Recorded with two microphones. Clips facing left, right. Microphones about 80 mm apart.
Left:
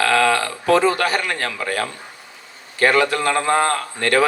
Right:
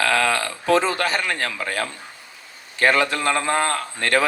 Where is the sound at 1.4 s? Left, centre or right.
Left.